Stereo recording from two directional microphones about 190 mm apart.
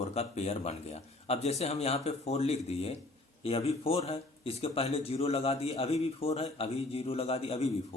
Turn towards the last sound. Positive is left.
turn(degrees=30)  # may be behind; listen again after turning